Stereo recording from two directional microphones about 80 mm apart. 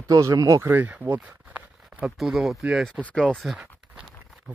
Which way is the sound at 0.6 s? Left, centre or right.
Right.